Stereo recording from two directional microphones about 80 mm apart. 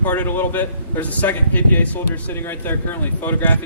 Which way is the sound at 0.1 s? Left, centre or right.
Left.